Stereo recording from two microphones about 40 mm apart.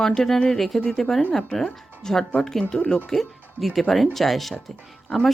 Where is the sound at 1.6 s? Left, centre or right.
Centre.